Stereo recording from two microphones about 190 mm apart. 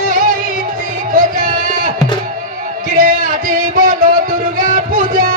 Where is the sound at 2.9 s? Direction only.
45° right (ahead or behind).